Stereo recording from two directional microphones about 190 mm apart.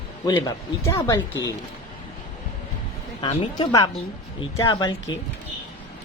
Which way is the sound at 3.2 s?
25° left (ahead or behind).